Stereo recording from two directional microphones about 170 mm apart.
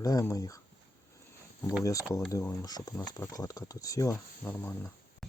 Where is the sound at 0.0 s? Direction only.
20° left (ahead or behind).